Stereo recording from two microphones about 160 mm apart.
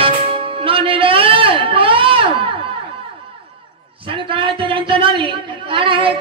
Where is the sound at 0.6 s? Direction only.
35° right (ahead or behind).